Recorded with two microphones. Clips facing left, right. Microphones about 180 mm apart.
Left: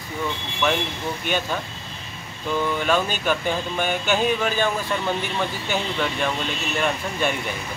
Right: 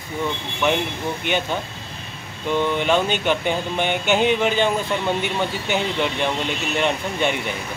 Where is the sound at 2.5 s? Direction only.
20° right (ahead or behind).